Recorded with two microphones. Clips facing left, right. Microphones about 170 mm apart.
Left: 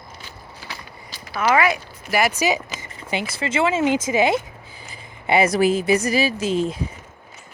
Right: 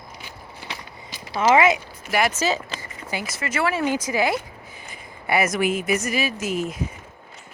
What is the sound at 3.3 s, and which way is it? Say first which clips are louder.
A woman's voice: left 3 dB; 25° left (ahead or behind).